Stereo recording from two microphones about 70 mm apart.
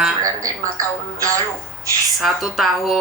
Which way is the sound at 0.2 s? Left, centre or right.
Right.